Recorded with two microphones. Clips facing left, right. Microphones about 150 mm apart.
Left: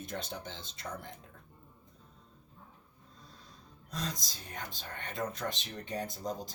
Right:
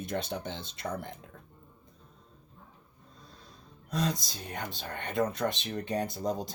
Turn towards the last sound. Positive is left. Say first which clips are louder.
# right 6 dB
turn(degrees=-65)  # may be behind; listen again after turning